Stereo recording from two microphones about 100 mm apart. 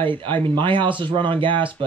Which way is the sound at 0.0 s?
55° right (ahead or behind).